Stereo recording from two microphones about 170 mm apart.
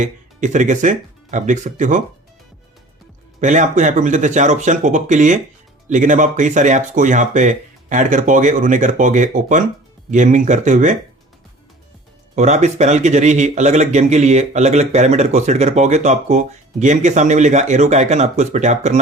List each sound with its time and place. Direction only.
0.0 s speech: 45° right (ahead or behind)
3.4 s speech: 45° right (ahead or behind)
12.4 s speech: 45° right (ahead or behind)